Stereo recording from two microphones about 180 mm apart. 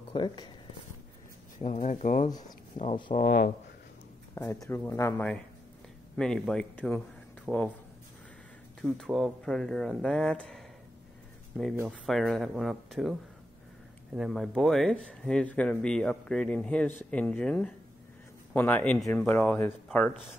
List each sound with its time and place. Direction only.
0.1 s speech: 25° left (ahead or behind)
1.6 s speech: 40° left (ahead or behind)
3.2 s speech: 55° left (ahead or behind)
4.4 s speech: 15° left (ahead or behind)
8.8 s speech: 5° left (ahead or behind)
14.1 s speech: centre (ahead or behind)